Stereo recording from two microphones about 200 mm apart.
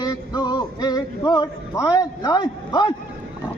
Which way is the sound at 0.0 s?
20° left (ahead or behind).